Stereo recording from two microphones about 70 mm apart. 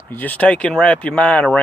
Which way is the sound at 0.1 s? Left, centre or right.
Left.